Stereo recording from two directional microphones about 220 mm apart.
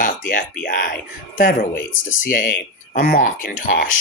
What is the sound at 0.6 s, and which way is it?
Speech, 40° left (ahead or behind).